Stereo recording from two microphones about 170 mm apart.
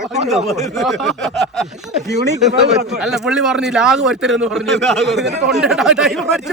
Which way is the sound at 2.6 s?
40° right (ahead or behind).